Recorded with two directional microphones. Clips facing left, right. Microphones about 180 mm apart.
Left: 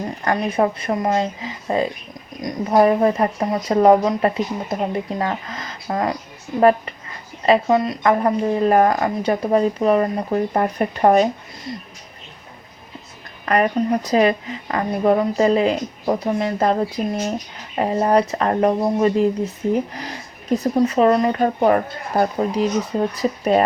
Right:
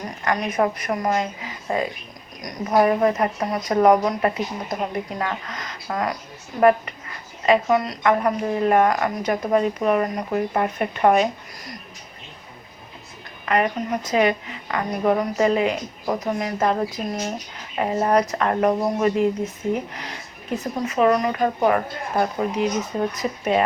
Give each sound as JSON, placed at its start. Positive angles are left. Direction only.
{"t": 0.3, "sound": "speech", "side_deg": 30}
{"t": 13.4, "sound": "speech", "side_deg": 40}
{"t": 17.7, "sound": "speech", "side_deg": 30}